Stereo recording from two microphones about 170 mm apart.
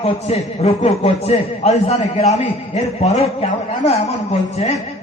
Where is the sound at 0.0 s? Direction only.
35° left (ahead or behind).